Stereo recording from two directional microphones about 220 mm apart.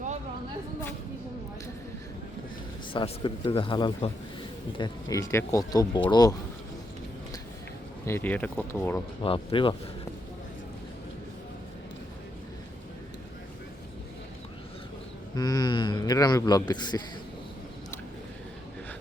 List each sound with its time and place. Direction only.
2.9 s a man's voice: 20° left (ahead or behind)
8.0 s speech: 10° left (ahead or behind)
9.2 s a man's voice: 25° left (ahead or behind)
15.4 s a man's voice: 20° left (ahead or behind)